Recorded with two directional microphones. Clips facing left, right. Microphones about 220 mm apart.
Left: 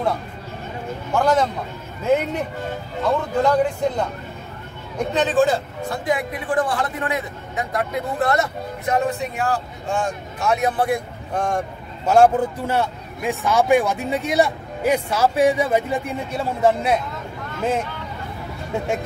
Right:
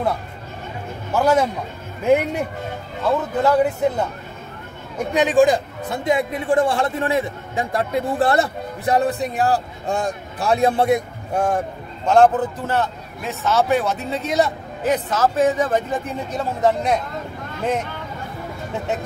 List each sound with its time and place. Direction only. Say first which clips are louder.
1.1 s speech: right 1 dB; 10° right (ahead or behind)
3.4 s a man's voice: right 3 dB; 5° right (ahead or behind); by 11.0 s 25° right (ahead or behind)
11.3 s speech: right 2 dB; 5° right (ahead or behind)
12.1 s a man's voice: even; 10° left (ahead or behind)